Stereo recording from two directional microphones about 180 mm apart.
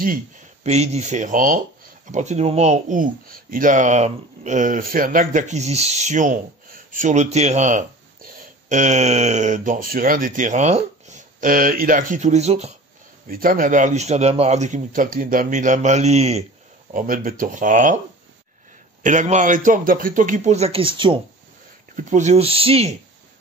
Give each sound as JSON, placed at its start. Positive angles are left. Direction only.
{"t": 0.7, "sound": "speech", "side_deg": -35}
{"t": 13.3, "sound": "speech", "side_deg": -50}
{"t": 16.9, "sound": "speech", "side_deg": -50}
{"t": 19.0, "sound": "speech", "side_deg": -45}
{"t": 21.9, "sound": "speech", "side_deg": -40}